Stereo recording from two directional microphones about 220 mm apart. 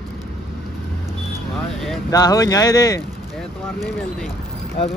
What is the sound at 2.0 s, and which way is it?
Speech, 15° left (ahead or behind).